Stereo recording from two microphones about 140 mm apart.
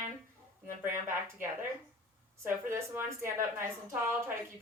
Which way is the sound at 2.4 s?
20° right (ahead or behind).